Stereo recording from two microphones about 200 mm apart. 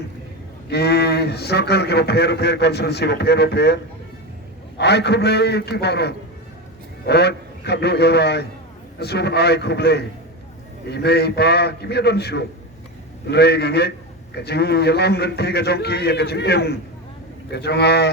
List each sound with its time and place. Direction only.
0.7 s a man's voice: 55° left (ahead or behind)
4.8 s a man's voice: 55° left (ahead or behind)